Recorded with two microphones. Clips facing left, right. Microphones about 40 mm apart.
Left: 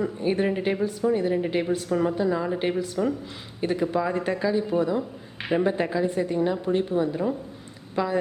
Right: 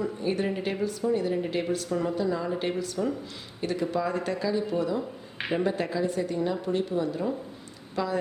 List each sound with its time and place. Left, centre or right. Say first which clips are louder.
0.0 s a woman's voice: left 4 dB; left